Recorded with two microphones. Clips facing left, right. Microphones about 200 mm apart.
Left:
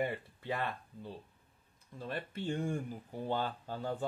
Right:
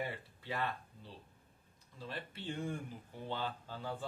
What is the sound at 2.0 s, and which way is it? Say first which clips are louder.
Speech: left 6 dB; 50° left (ahead or behind).